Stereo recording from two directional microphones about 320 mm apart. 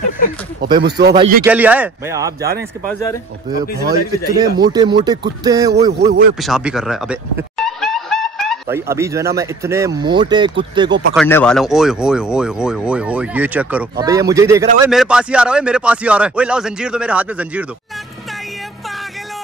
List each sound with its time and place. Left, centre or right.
0.7 s speech: right
1.1 s speech: centre
1.5 s speech: centre
3.9 s a man's voice: centre
6.4 s speech: centre
10.9 s speech: right
11.1 s speech: centre